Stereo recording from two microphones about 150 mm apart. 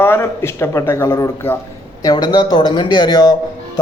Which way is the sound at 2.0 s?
25° left (ahead or behind).